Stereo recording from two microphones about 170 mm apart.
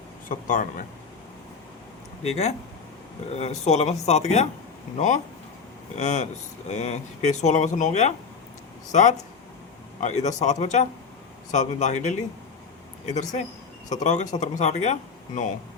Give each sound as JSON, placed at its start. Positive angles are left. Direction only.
{"t": 0.3, "sound": "speech", "side_deg": 50}
{"t": 3.3, "sound": "speech", "side_deg": 40}